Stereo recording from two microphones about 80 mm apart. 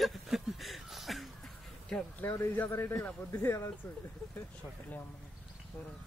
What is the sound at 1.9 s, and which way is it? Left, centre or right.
Speech, centre.